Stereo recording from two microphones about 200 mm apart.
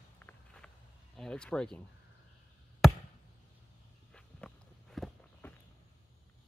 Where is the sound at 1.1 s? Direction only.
5° left (ahead or behind).